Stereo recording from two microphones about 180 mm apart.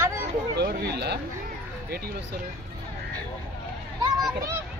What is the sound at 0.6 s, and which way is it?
Speech, 65° right (ahead or behind).